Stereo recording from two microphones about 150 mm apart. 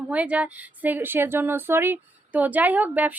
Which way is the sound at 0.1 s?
10° right (ahead or behind).